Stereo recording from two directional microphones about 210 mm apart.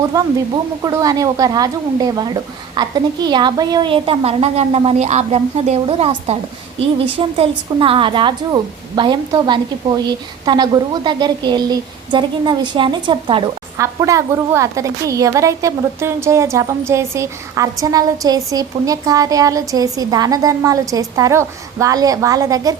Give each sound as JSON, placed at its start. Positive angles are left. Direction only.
{"t": 0.1, "sound": "a woman's voice", "side_deg": -15}